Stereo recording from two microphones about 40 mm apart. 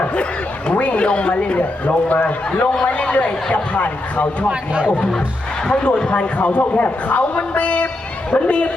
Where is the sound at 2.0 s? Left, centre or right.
Left.